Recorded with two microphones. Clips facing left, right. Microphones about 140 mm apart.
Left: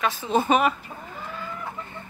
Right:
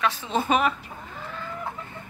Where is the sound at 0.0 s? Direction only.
Centre (ahead or behind).